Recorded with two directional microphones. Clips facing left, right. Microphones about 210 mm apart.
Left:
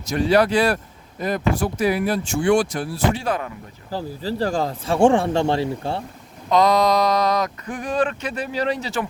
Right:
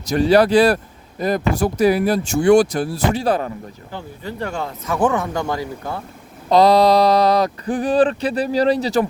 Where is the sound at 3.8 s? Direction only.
35° left (ahead or behind).